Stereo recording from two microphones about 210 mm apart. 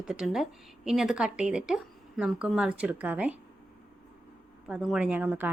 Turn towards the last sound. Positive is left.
turn(degrees=-10)  # may be behind; listen again after turning